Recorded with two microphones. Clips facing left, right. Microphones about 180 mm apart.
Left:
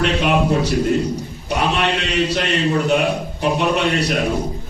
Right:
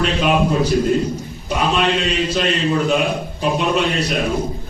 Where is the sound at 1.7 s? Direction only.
70° left (ahead or behind).